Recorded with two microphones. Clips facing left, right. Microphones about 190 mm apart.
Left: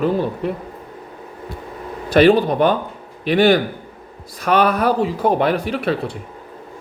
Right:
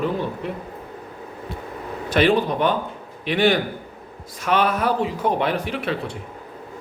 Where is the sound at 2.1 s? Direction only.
40° left (ahead or behind).